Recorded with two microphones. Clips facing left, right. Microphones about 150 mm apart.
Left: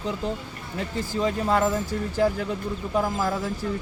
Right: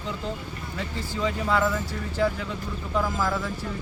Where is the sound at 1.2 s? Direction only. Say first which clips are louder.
Left 2 dB; 40° left (ahead or behind).